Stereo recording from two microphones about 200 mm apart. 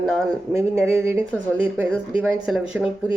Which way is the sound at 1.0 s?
15° right (ahead or behind).